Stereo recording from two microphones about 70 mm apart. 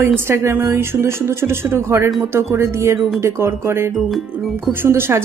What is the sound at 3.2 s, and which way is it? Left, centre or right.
Speech, right.